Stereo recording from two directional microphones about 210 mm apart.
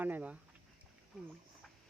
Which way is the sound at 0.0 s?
5° right (ahead or behind).